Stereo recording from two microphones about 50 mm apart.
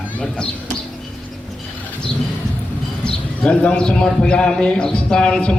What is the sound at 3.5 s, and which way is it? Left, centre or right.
A man's voice, left.